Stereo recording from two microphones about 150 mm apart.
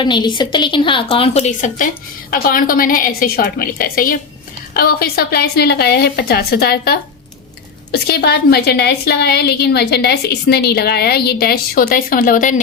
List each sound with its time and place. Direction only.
0.0 s a woman's voice: 30° left (ahead or behind); by 1.9 s 55° left (ahead or behind)
2.3 s a woman's voice: 70° left (ahead or behind)
4.7 s a woman's voice: 85° left; by 12.5 s 65° left (ahead or behind)